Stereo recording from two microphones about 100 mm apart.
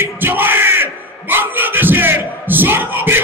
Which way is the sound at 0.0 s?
20° right (ahead or behind).